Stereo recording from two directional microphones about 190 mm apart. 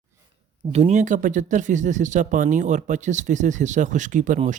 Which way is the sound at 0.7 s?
35° right (ahead or behind).